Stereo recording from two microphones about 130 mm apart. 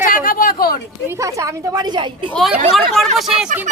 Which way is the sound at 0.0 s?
90° left.